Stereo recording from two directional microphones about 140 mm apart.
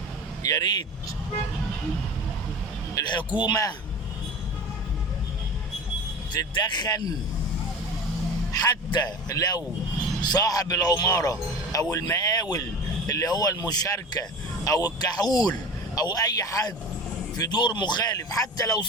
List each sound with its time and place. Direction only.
0.4 s speech: 30° left (ahead or behind)
2.9 s vehicle: 30° left (ahead or behind)
3.4 s speech: 30° left (ahead or behind)
6.3 s speech: 30° left (ahead or behind)
8.5 s speech: 30° left (ahead or behind)